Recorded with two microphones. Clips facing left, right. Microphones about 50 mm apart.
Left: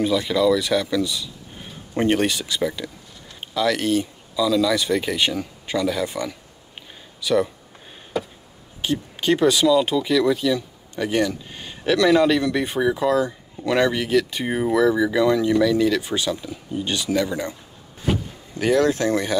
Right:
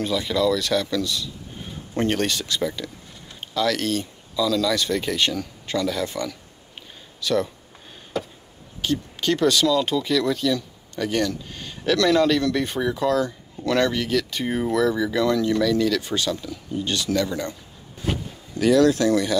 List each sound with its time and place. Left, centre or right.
0.0 s speech: centre
8.2 s chop: centre
8.8 s speech: centre
18.5 s speech: left